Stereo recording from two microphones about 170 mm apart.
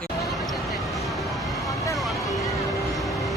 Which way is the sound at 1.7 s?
20° left (ahead or behind).